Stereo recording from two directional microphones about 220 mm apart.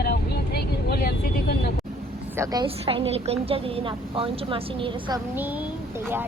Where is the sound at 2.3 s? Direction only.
15° right (ahead or behind).